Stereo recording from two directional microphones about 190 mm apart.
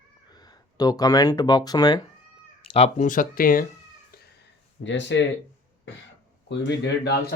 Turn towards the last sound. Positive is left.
turn(degrees=65)  # may be behind; listen again after turning